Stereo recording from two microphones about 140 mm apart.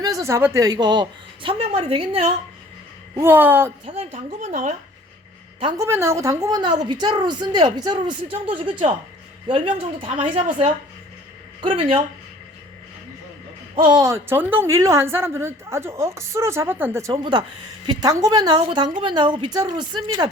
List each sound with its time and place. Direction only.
0.0 s a woman's voice: 25° right (ahead or behind); by 2.3 s 40° right (ahead or behind)
3.2 s speech: 15° right (ahead or behind)
3.8 s speech: 45° right (ahead or behind)
4.4 s speech: 55° right (ahead or behind)
5.7 s a woman's voice: 20° right (ahead or behind); by 10.1 s 35° right (ahead or behind)
11.6 s a woman's voice: 40° right (ahead or behind)
13.8 s a woman's voice: 25° right (ahead or behind)